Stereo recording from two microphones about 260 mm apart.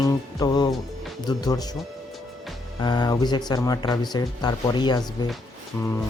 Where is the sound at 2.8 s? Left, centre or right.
Centre.